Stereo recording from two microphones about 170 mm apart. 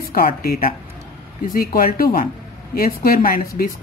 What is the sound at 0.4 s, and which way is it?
Speech, 60° left (ahead or behind).